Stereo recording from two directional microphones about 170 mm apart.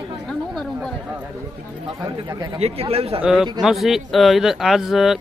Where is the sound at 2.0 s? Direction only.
25° right (ahead or behind).